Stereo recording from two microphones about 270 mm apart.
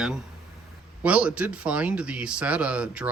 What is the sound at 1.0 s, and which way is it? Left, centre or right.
Speech, centre.